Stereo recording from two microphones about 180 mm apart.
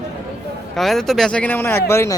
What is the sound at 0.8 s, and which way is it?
Speech, centre (ahead or behind).